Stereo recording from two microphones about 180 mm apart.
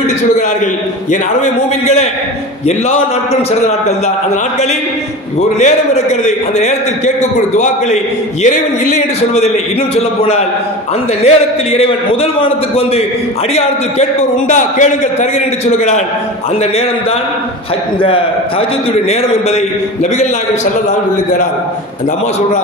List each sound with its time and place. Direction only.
1.1 s a man's voice: 40° left (ahead or behind)
5.6 s a man's voice: 40° left (ahead or behind)
14.5 s a man's voice: 45° left (ahead or behind)
19.0 s a man's voice: 40° left (ahead or behind)